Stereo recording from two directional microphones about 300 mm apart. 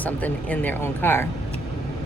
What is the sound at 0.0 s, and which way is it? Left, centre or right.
Speech, centre.